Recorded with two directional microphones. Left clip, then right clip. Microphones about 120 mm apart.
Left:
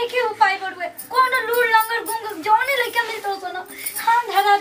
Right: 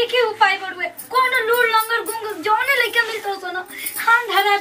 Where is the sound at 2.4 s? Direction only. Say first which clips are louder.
Right 1 dB; 5° left (ahead or behind).